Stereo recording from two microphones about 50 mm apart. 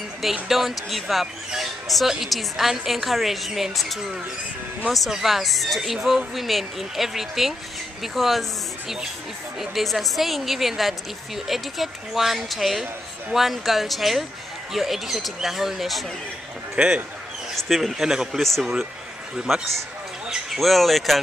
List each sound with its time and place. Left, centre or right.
0.2 s speech: centre
16.7 s speech: centre
17.6 s speech: centre
18.4 s speech: centre